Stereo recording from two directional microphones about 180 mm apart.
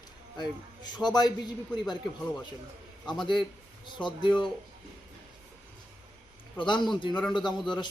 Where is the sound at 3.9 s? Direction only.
25° left (ahead or behind).